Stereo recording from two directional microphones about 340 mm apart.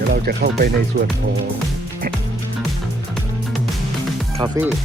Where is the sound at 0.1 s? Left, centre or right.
Right.